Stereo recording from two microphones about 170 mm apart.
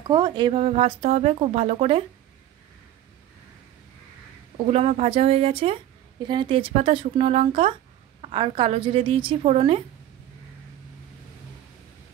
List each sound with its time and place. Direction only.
0.1 s speech: 25° right (ahead or behind)
0.6 s a woman's voice: 35° right (ahead or behind)
4.6 s a woman's voice: 40° right (ahead or behind)